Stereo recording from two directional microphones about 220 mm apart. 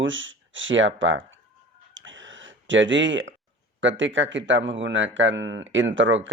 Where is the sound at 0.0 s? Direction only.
60° right (ahead or behind).